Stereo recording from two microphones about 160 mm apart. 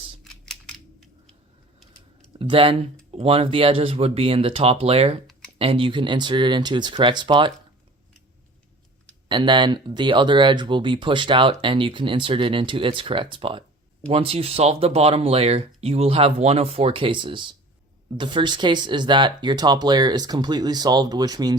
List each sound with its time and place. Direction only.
0.4 s a sound: centre (ahead or behind)
2.4 s speech: 35° right (ahead or behind)
9.3 s speech: 30° right (ahead or behind)